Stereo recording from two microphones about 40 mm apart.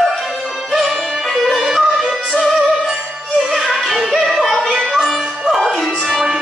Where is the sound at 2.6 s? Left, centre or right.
Centre.